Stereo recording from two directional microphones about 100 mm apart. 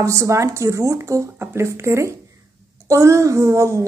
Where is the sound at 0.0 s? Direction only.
30° right (ahead or behind).